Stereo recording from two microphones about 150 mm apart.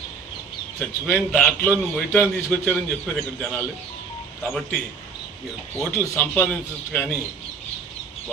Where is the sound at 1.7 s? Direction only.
10° left (ahead or behind).